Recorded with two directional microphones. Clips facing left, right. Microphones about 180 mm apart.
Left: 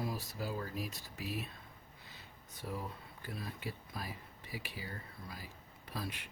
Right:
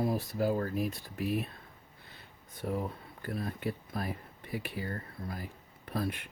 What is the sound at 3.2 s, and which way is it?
Speech, 55° right (ahead or behind).